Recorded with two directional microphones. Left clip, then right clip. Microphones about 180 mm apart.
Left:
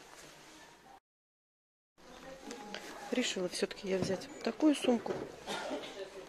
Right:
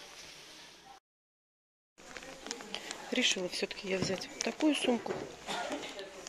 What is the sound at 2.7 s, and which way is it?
Speech, 5° left (ahead or behind).